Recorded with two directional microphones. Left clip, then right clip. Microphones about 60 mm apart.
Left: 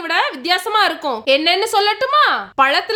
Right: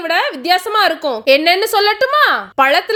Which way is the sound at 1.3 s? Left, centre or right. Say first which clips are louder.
Right 4 dB; right.